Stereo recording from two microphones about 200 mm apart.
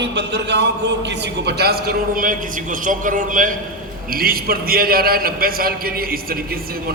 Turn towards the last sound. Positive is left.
turn(degrees=-50)  # may be behind; listen again after turning